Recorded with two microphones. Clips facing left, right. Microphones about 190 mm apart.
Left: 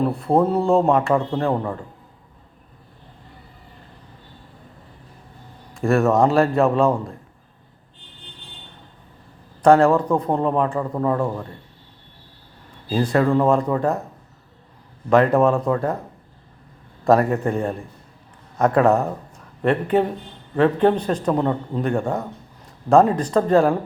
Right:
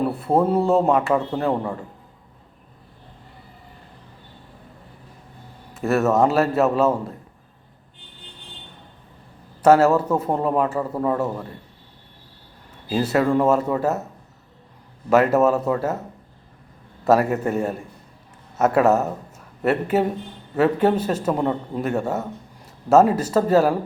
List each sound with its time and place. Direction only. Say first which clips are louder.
0.0 s a man's voice: left 1 dB; 5° right (ahead or behind)
5.7 s a man's voice: left 1 dB; 5° right (ahead or behind)
9.6 s a man's voice: left 1 dB; 5° right (ahead or behind)
12.9 s a man's voice: left 1 dB; 5° right (ahead or behind)
15.1 s a man's voice: left 1 dB; 5° right (ahead or behind)
17.0 s a man's voice: left 1 dB; 5° right (ahead or behind)